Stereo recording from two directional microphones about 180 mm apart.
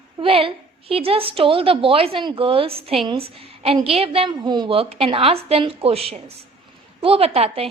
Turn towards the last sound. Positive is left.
turn(degrees=-35)  # may be behind; listen again after turning